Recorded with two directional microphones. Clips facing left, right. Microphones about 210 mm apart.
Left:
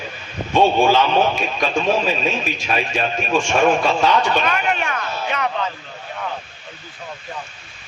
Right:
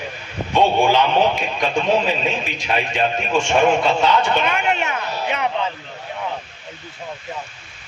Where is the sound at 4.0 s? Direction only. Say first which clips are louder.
Even; 20° right (ahead or behind).